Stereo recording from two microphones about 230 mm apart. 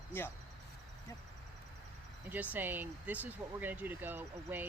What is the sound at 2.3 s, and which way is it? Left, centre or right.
Speech, centre.